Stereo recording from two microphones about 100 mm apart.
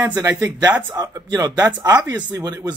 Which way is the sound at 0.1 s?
40° right (ahead or behind).